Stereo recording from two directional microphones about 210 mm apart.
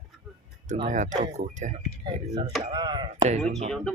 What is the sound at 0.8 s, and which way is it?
Speech, 35° right (ahead or behind).